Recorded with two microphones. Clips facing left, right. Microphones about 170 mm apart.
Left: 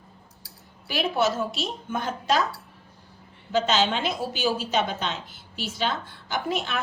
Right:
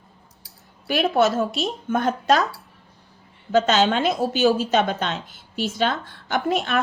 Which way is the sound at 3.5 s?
50° right (ahead or behind).